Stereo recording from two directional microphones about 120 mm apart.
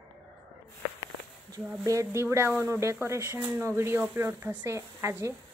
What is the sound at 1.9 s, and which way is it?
Speech, 25° right (ahead or behind).